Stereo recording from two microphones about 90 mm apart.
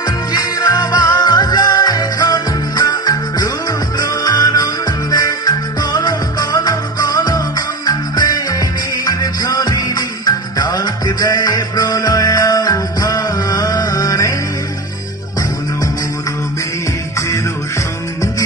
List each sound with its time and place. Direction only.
0.3 s music: 45° left (ahead or behind)